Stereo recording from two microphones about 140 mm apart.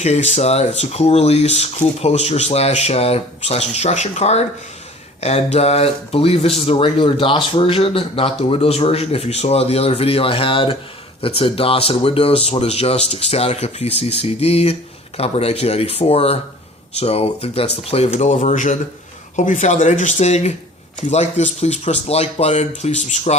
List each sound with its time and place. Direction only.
0.0 s speech: 55° left (ahead or behind)